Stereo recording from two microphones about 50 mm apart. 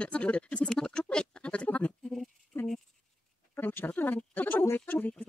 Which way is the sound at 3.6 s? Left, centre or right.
Left.